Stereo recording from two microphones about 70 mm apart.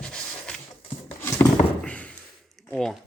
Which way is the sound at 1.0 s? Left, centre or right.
Left.